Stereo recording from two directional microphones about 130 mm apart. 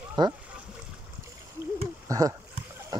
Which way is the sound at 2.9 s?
35° right (ahead or behind).